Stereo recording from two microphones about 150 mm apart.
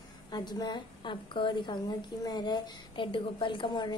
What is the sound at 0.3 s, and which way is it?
A woman's voice, 30° left (ahead or behind).